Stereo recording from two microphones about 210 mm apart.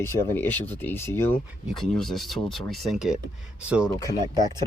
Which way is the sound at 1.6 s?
Centre (ahead or behind).